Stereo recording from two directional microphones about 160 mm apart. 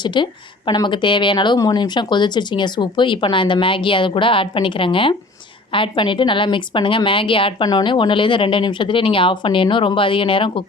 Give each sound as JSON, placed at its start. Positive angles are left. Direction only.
{"t": 0.0, "sound": "a woman's voice", "side_deg": 30}